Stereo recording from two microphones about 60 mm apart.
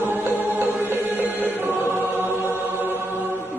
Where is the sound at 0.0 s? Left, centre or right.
Right.